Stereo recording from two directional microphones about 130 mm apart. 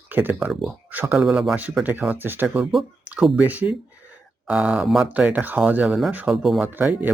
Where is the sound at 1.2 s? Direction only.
5° right (ahead or behind).